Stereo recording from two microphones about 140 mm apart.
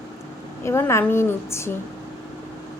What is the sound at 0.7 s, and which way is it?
A woman's voice, 20° left (ahead or behind).